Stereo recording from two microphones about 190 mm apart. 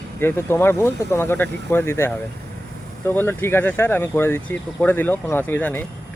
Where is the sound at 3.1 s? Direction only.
10° left (ahead or behind).